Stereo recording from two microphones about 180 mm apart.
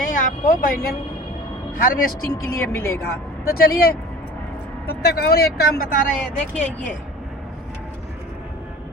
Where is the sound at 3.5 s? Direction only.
55° left (ahead or behind).